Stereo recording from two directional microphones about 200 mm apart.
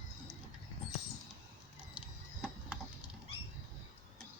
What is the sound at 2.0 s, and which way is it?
Printer, 5° right (ahead or behind).